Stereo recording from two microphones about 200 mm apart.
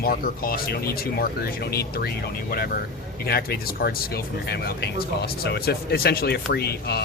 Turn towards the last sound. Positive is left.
turn(degrees=55)  # may be behind; listen again after turning